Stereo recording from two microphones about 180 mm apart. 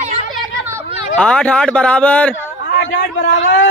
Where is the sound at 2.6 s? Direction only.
55° left (ahead or behind); by 3.6 s 90° left.